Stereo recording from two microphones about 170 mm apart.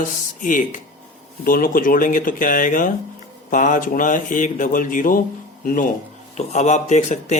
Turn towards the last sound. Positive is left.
turn(degrees=45)  # may be behind; listen again after turning